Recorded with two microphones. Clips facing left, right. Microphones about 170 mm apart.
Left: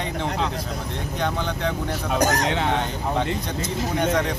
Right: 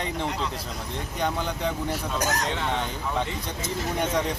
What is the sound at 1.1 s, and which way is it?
Speech, 10° right (ahead or behind).